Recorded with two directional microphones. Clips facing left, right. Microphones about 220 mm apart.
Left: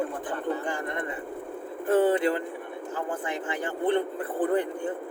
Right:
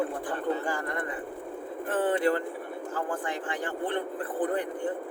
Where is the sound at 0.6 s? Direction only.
20° left (ahead or behind).